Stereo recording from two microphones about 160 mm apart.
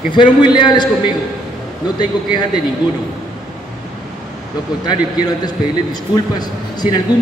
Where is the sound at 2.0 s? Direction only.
30° left (ahead or behind).